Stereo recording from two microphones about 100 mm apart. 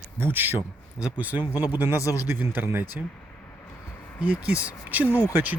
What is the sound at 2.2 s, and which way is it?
Speech, 20° right (ahead or behind).